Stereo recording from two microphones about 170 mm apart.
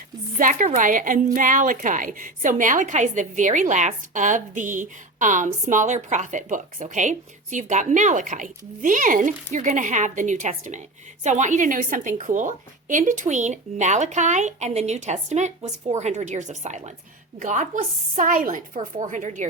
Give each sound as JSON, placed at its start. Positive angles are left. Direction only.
{"t": 0.3, "sound": "a woman's voice", "side_deg": -50}